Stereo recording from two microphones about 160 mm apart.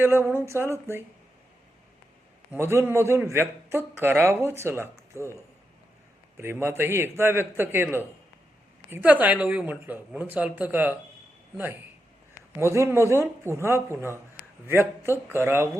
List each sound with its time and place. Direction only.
0.0 s a man's voice: 15° right (ahead or behind)
2.5 s a man's voice: 15° right (ahead or behind)
6.3 s a man's voice: 15° right (ahead or behind)